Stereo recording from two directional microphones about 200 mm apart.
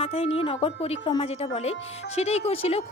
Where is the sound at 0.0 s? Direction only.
30° left (ahead or behind).